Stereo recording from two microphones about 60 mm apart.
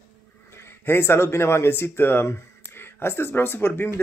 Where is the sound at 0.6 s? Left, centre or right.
Left.